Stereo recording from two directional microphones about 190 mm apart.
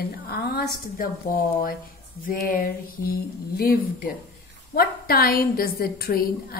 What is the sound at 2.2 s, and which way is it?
A woman's voice, 50° left (ahead or behind).